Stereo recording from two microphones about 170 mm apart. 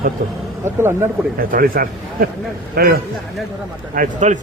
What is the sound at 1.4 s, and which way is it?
Speech, 55° right (ahead or behind).